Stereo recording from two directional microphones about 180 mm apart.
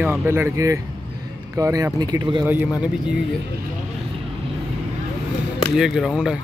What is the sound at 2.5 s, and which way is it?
Speech, 10° right (ahead or behind).